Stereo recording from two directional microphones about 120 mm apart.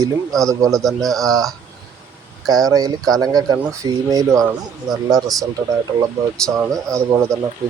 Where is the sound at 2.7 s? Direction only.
30° right (ahead or behind).